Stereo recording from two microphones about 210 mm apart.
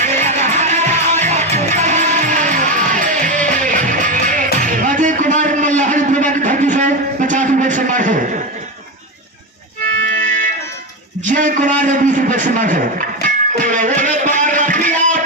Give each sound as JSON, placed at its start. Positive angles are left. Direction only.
{"t": 0.0, "sound": "music", "side_deg": -35}
{"t": 4.6, "sound": "a sound", "side_deg": -40}
{"t": 11.3, "sound": "a man's voice", "side_deg": -40}
{"t": 13.2, "sound": "music", "side_deg": -40}